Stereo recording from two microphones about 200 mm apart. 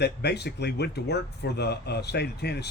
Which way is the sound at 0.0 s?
55° left (ahead or behind).